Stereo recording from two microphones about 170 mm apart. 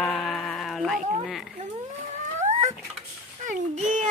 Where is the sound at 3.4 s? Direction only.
45° right (ahead or behind).